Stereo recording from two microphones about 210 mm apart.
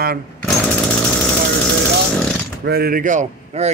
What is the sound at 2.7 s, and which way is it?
A man's voice, 45° right (ahead or behind).